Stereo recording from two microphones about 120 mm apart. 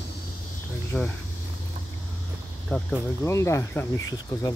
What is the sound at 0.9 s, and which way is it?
Speech, 5° left (ahead or behind).